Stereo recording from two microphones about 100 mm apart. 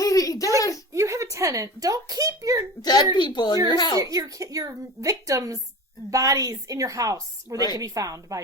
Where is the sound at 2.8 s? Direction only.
45° left (ahead or behind).